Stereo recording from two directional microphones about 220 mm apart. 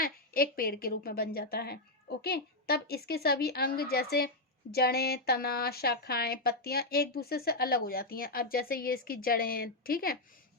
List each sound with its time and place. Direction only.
0.0 s speech: 40° left (ahead or behind)